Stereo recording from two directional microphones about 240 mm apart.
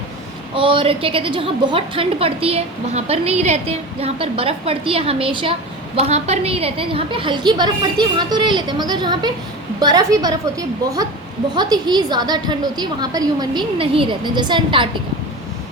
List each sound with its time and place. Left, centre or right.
0.5 s a woman's voice: right
11.5 s a woman's voice: centre